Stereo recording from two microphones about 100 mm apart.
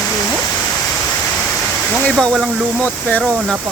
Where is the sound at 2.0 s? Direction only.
5° left (ahead or behind).